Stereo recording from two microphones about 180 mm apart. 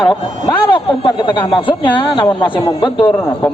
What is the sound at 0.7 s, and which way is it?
A man's voice, 25° left (ahead or behind).